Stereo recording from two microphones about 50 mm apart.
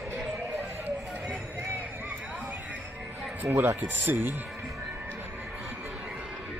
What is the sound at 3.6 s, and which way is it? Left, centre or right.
Speech, right.